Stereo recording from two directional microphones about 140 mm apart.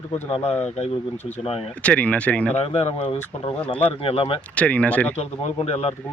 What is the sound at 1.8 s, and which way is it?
Speech, 10° left (ahead or behind).